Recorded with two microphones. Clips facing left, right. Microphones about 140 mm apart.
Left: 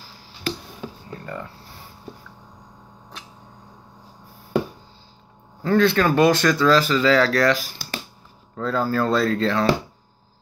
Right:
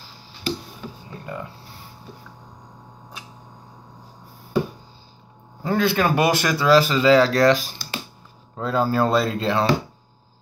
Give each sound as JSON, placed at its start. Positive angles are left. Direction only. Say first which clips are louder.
{"t": 1.2, "sound": "speech", "louder": "right 1 dB", "side_deg": -15}
{"t": 5.6, "sound": "speech", "louder": "left 2 dB", "side_deg": -10}